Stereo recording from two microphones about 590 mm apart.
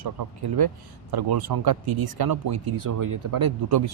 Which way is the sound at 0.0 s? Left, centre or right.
Right.